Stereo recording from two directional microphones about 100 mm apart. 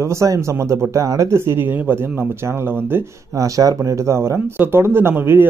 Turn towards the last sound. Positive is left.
turn(degrees=-25)  # may be behind; listen again after turning